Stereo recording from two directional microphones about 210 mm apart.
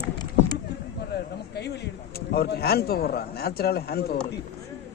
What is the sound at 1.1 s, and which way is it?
Speech, 50° left (ahead or behind).